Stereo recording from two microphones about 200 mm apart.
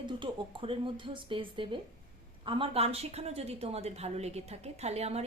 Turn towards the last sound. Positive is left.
turn(degrees=-30)  # may be behind; listen again after turning